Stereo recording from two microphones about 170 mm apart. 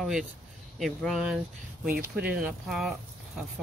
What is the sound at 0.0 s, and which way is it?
Speech, 5° right (ahead or behind).